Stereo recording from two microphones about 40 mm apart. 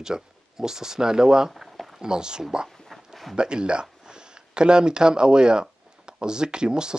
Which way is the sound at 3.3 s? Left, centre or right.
Right.